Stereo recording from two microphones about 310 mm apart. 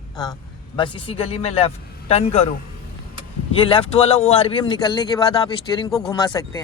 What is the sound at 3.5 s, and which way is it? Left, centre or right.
A man's voice, centre.